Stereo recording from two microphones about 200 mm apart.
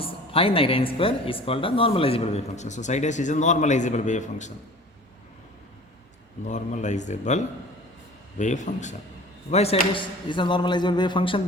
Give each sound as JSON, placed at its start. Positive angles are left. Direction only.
{"t": 0.0, "sound": "speech", "side_deg": 25}
{"t": 6.5, "sound": "speech", "side_deg": 35}